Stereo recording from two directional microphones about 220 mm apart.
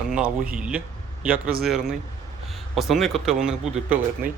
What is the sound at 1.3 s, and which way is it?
Speech, 40° right (ahead or behind).